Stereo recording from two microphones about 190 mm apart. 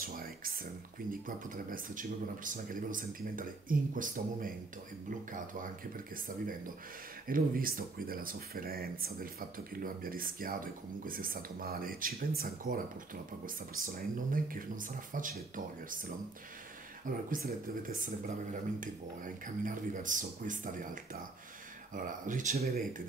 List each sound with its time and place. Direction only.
0.0 s a sound: 50° right (ahead or behind)
1.2 s speech: 45° right (ahead or behind)
17.3 s speech: 45° right (ahead or behind)